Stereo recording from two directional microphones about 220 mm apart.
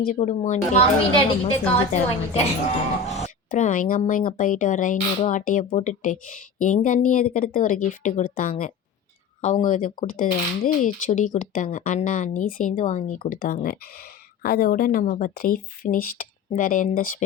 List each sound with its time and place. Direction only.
0.0 s a woman's voice: 35° left (ahead or behind)